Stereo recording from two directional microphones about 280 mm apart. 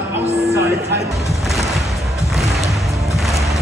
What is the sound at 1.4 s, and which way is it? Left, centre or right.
Music, centre.